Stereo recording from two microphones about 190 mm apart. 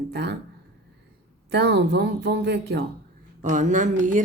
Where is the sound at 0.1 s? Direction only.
60° right (ahead or behind).